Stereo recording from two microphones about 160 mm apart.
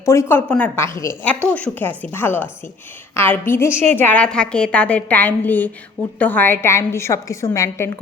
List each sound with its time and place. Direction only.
0.0 s a woman's voice: 15° left (ahead or behind)